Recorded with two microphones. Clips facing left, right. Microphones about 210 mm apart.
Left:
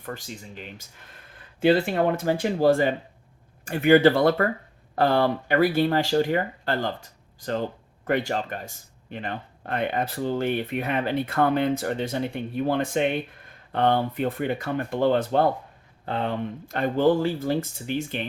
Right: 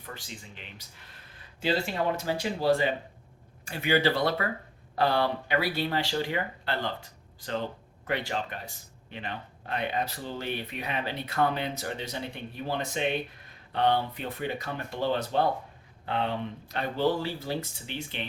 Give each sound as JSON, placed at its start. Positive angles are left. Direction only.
{"t": 0.0, "sound": "speech", "side_deg": 45}